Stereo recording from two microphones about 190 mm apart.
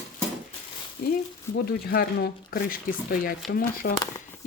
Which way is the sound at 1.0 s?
50° left (ahead or behind).